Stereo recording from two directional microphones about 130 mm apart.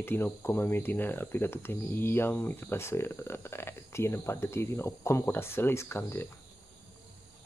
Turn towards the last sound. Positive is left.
turn(degrees=20)  # may be behind; listen again after turning